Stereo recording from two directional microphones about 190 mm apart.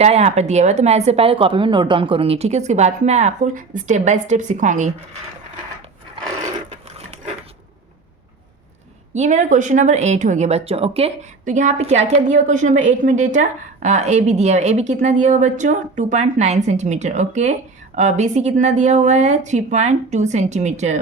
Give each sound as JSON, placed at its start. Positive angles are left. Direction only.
{"t": 0.0, "sound": "speech", "side_deg": -35}
{"t": 9.1, "sound": "speech", "side_deg": -40}